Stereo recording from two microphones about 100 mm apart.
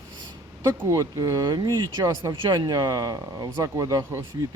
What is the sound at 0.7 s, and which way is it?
Speech, 35° right (ahead or behind).